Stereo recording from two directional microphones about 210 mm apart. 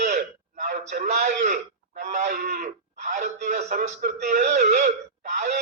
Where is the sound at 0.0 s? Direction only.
35° right (ahead or behind).